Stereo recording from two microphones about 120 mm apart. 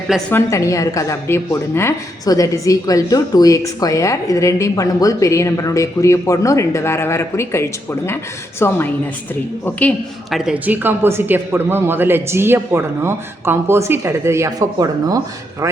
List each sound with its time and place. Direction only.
0.3 s a woman's voice: 20° left (ahead or behind)
10.3 s speech: 10° right (ahead or behind); by 15.2 s 30° right (ahead or behind)